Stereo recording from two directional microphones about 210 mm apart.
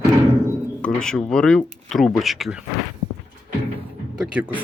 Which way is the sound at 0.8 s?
5° left (ahead or behind).